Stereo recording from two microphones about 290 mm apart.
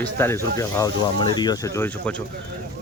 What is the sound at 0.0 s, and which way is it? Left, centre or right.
Speech, centre.